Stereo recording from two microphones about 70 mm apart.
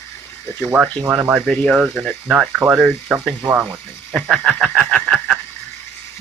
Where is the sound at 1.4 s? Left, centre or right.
Centre.